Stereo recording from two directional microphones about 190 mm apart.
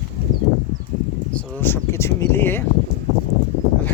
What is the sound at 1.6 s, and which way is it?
Speech, 10° left (ahead or behind).